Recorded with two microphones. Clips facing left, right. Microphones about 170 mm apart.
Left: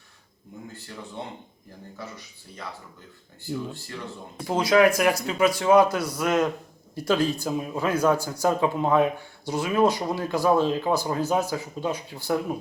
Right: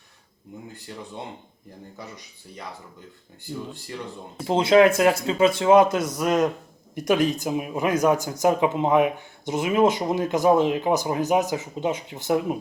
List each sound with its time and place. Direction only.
4.4 s speech: 25° right (ahead or behind)